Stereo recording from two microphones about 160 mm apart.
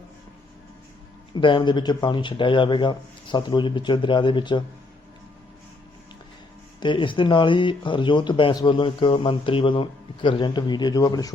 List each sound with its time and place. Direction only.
1.3 s speech: 30° left (ahead or behind)
6.7 s speech: 30° left (ahead or behind)